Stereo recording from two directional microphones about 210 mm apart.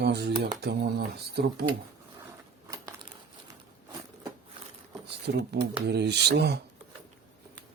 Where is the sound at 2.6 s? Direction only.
15° right (ahead or behind).